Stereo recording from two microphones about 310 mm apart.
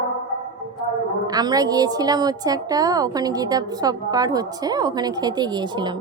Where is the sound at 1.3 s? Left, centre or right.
Centre.